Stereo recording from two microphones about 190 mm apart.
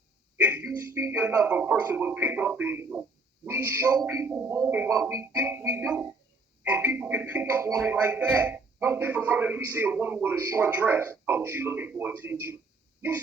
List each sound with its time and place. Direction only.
0.3 s frog: 10° right (ahead or behind)